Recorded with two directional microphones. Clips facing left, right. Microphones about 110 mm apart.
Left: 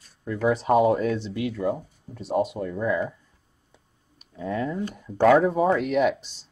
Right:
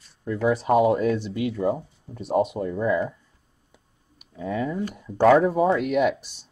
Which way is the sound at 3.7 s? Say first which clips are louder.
Right 1 dB; 10° right (ahead or behind).